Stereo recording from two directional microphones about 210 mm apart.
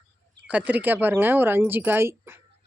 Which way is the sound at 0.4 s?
5° right (ahead or behind).